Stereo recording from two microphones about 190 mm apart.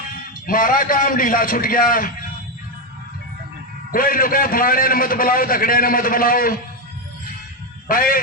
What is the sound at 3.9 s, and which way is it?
A man's voice, 50° left (ahead or behind).